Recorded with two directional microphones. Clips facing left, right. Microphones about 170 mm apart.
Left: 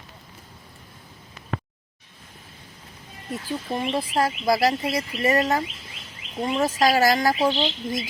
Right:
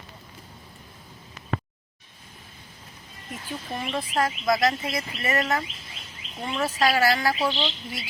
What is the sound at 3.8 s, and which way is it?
Speech, 30° left (ahead or behind).